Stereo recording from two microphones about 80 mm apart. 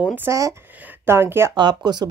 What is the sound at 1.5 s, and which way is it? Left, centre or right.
Speech, right.